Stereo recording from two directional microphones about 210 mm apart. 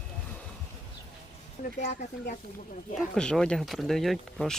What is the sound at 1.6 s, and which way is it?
Speech, 35° left (ahead or behind).